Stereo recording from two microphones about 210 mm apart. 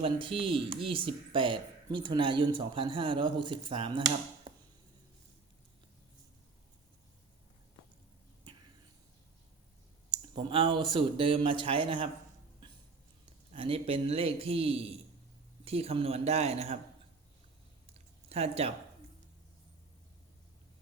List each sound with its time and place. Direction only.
0.0 s speech: 25° right (ahead or behind)
10.1 s speech: 25° right (ahead or behind)
13.5 s speech: 30° right (ahead or behind)
17.9 s a sound: 30° right (ahead or behind)